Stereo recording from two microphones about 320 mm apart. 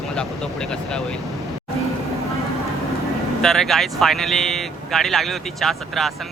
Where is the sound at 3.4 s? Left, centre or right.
Centre.